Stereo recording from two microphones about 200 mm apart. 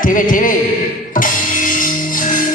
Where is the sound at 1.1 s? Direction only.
40° left (ahead or behind).